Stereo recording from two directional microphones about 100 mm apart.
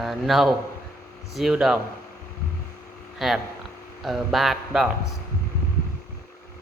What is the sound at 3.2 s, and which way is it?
A man's voice, centre (ahead or behind).